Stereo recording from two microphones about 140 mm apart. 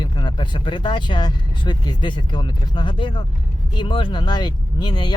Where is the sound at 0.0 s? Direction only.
30° left (ahead or behind).